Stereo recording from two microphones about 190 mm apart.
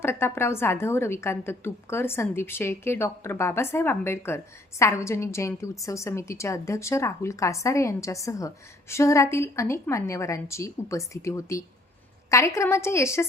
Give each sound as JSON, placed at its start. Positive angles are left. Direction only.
{"t": 0.0, "sound": "a woman's voice", "side_deg": 10}